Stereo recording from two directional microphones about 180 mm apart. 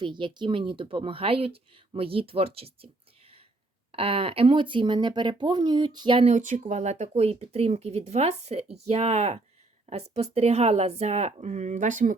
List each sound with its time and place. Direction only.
0.0 s speech: 25° right (ahead or behind)
6.3 s speech: 45° right (ahead or behind)